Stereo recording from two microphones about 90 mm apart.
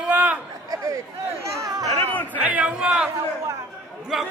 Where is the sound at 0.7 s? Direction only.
40° right (ahead or behind).